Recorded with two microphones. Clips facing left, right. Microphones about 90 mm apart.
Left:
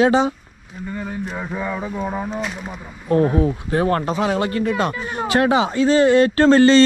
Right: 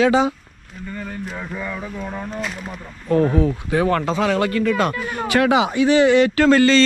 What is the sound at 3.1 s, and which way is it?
Speech, 20° left (ahead or behind).